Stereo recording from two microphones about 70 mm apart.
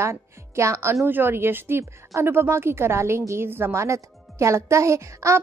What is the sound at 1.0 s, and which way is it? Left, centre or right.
Speech, right.